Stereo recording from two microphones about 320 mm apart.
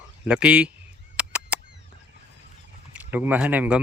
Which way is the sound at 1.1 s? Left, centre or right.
Centre.